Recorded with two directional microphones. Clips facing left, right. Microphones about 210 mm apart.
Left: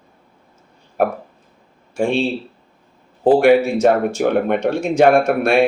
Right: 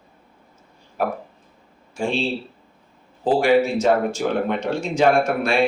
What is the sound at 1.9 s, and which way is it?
Speech, 60° left (ahead or behind).